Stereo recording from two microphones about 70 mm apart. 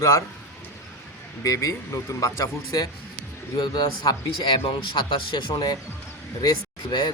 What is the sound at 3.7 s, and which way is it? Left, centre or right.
Speech, left.